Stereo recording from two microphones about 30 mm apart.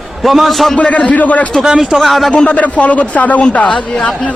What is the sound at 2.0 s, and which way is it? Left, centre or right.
Speech, centre.